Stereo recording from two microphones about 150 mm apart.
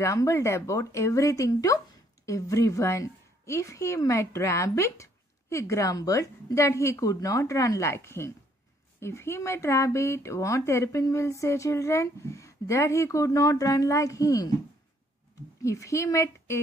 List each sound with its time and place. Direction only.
0.0 s a woman's voice: 20° left (ahead or behind)
15.6 s a woman's voice: 20° left (ahead or behind)